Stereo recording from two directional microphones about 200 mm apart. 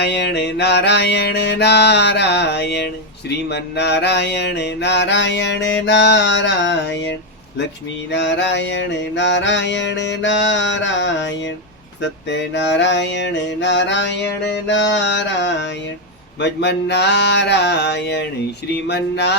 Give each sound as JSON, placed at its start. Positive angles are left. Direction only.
{"t": 0.0, "sound": "mantra", "side_deg": 55}